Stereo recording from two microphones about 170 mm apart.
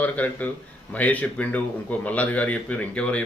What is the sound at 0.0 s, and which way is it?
A man's voice, 10° left (ahead or behind).